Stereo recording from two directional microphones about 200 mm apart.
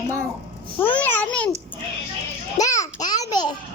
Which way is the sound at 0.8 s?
10° left (ahead or behind).